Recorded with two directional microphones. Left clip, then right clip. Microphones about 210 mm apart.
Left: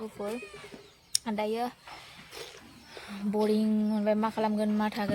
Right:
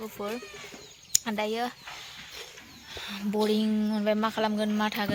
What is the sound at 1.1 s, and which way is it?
Speech, 5° right (ahead or behind).